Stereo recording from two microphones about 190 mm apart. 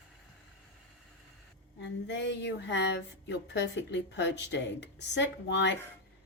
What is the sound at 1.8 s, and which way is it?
Speech, 70° left (ahead or behind).